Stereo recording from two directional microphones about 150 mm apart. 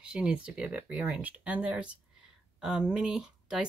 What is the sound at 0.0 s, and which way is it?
Speech, 5° right (ahead or behind).